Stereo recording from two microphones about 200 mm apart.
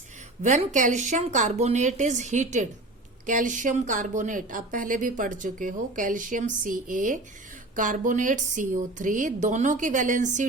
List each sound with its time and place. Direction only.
0.4 s a woman's voice: 35° right (ahead or behind)